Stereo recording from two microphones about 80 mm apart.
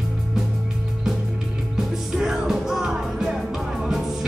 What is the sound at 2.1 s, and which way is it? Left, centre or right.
Music, centre.